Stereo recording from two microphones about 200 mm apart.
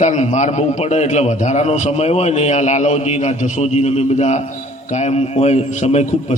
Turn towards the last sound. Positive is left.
turn(degrees=35)  # may be behind; listen again after turning